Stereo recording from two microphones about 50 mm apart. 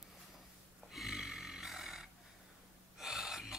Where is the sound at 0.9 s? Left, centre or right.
Centre.